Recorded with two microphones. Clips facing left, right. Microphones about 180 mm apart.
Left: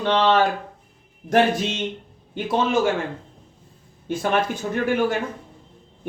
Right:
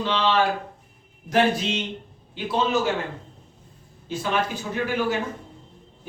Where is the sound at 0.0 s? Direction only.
50° left (ahead or behind).